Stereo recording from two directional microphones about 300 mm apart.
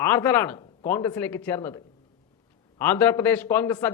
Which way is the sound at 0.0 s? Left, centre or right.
Centre.